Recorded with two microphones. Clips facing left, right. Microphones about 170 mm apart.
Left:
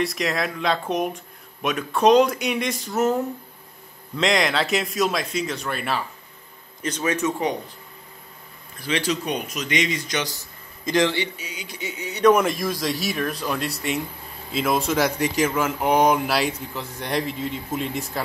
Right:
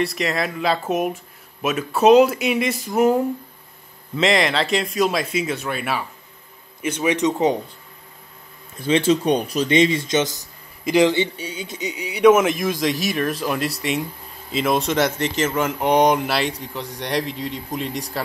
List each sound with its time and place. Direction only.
0.0 s a man's voice: centre (ahead or behind)
4.2 s a man's voice: centre (ahead or behind); by 7.5 s 20° right (ahead or behind)
8.7 s a man's voice: 25° right (ahead or behind)
11.3 s speech: 30° right (ahead or behind); by 18.0 s centre (ahead or behind)